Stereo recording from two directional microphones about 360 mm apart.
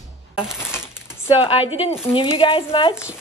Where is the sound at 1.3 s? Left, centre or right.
Centre.